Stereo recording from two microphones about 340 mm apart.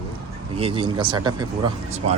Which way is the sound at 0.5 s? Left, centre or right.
Centre.